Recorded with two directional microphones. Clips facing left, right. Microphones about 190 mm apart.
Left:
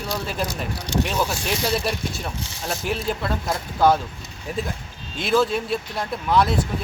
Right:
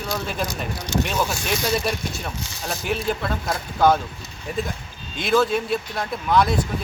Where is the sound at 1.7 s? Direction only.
Centre (ahead or behind).